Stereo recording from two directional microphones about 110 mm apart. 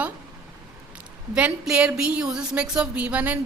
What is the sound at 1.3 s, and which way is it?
A woman's voice, 10° right (ahead or behind).